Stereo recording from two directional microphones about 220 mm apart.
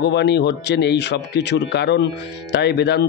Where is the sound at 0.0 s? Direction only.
50° left (ahead or behind).